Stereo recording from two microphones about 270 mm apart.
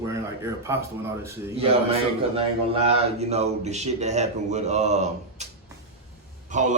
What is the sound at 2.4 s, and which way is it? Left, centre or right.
Speech, right.